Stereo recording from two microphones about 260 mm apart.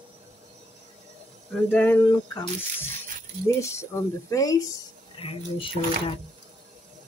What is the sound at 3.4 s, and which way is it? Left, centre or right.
Speech, centre.